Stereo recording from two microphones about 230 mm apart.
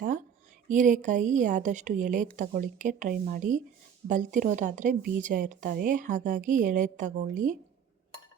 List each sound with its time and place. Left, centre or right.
0.7 s a woman's voice: right